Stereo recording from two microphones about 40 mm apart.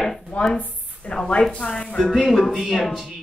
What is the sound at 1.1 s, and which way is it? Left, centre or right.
Speech, left.